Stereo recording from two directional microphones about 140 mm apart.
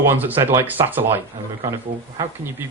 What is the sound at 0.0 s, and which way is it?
Speech, 15° right (ahead or behind).